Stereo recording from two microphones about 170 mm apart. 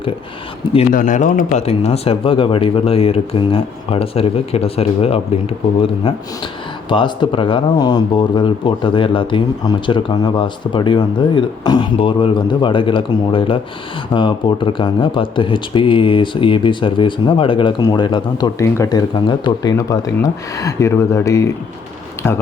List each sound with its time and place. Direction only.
0.6 s speech: 35° left (ahead or behind)
0.9 s speech: 50° left (ahead or behind); by 22.4 s 15° left (ahead or behind)